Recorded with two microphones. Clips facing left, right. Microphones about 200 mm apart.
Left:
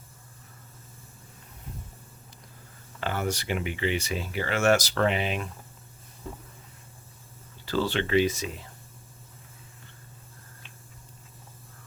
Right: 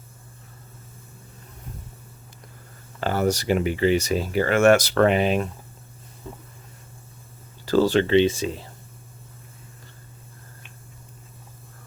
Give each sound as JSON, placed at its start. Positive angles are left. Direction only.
{"t": 3.0, "sound": "speech", "side_deg": -40}
{"t": 7.6, "sound": "speech", "side_deg": -45}
{"t": 8.1, "sound": "speech", "side_deg": -30}